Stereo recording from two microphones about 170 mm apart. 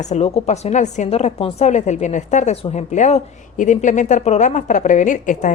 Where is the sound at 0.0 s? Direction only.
40° left (ahead or behind).